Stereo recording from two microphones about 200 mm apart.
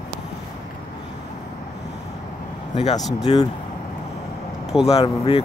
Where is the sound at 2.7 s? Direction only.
35° left (ahead or behind).